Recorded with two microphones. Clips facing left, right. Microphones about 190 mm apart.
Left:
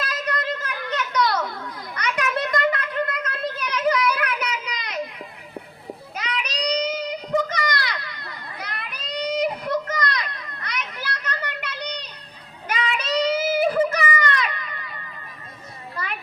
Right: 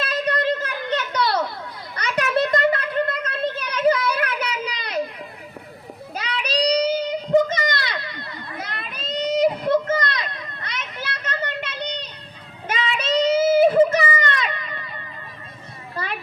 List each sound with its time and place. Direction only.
0.0 s a sound: 30° right (ahead or behind)
6.1 s child singing: 30° right (ahead or behind)
16.0 s children playing: 30° right (ahead or behind)